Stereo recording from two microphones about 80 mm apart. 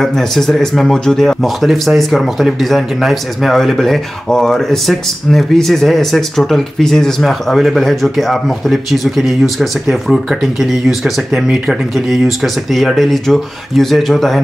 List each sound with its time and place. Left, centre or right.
0.0 s speech: centre